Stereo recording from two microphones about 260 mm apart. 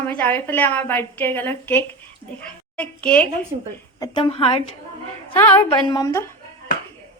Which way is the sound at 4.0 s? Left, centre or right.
Centre.